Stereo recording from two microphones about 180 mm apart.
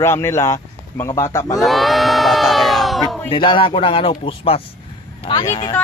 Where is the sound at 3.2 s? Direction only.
30° left (ahead or behind).